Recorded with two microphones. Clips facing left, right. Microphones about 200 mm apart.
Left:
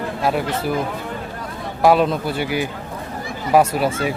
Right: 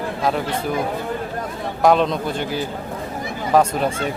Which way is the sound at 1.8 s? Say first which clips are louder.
Left 1 dB; 5° left (ahead or behind).